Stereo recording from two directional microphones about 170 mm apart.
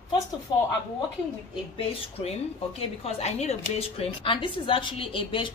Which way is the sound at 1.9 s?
35° left (ahead or behind).